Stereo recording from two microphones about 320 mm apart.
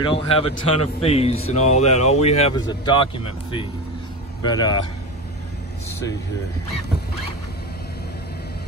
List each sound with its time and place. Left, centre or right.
0.0 s speech: centre